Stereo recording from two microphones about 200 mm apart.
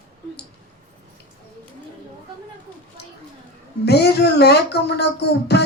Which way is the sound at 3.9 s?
55° left (ahead or behind).